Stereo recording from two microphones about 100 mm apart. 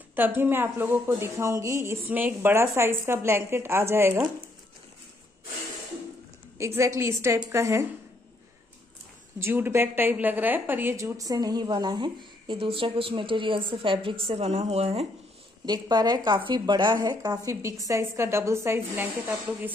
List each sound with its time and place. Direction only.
0.1 s a woman's voice: 20° right (ahead or behind)
2.0 s a woman's voice: 15° right (ahead or behind)
6.6 s a woman's voice: 30° right (ahead or behind)
9.4 s a woman's voice: 25° right (ahead or behind)
11.1 s speech: 35° right (ahead or behind); by 15.0 s 90° right
15.6 s speech: 45° right (ahead or behind)
17.5 s a woman's voice: 30° right (ahead or behind)